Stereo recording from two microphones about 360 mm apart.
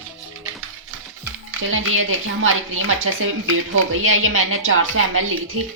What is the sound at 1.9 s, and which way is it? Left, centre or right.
Speech, right.